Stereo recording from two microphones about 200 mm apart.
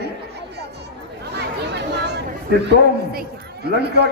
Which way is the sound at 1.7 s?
55° right (ahead or behind).